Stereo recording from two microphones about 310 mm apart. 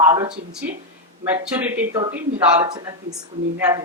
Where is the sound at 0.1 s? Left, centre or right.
Centre.